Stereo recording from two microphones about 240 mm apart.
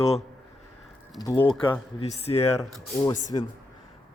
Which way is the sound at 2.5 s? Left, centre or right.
Centre.